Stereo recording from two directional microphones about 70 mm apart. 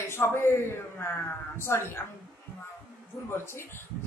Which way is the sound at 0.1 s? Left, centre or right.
Left.